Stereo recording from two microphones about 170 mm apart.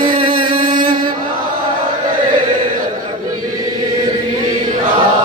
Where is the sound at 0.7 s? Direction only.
55° right (ahead or behind).